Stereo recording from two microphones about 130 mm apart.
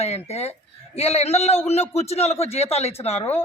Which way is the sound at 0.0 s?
55° left (ahead or behind).